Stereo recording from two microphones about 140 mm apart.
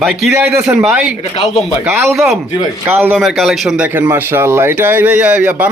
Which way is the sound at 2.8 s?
15° right (ahead or behind).